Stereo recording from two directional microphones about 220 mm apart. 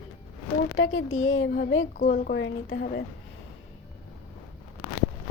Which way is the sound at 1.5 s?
40° left (ahead or behind).